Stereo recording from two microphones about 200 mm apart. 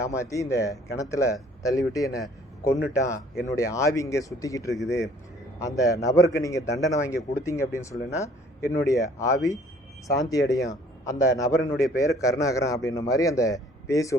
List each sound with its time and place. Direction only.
0.0 s a man's voice: 15° left (ahead or behind)